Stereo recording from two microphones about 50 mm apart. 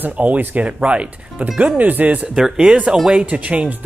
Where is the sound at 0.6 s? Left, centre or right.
Right.